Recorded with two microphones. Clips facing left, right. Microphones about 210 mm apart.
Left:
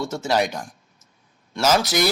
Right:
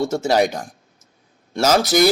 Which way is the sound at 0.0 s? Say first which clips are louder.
Right 5 dB; 40° right (ahead or behind).